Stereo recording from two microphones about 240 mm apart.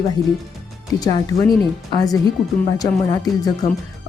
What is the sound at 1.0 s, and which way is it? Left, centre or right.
Speech, centre.